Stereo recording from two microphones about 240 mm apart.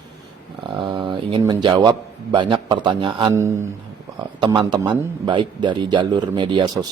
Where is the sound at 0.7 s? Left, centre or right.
Centre.